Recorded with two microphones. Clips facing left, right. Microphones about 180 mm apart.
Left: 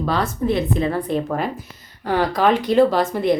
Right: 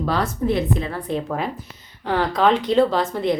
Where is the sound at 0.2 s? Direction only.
25° left (ahead or behind).